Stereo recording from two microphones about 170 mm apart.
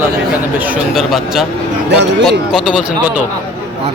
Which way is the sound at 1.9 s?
90° right.